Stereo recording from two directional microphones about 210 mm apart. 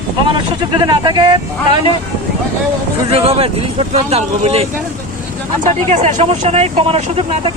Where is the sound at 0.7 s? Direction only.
20° right (ahead or behind).